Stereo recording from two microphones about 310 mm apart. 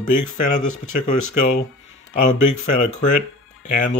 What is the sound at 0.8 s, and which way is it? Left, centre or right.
Speech, left.